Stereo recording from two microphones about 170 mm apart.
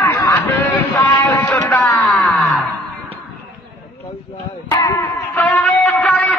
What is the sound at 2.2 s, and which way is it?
Wail, centre (ahead or behind).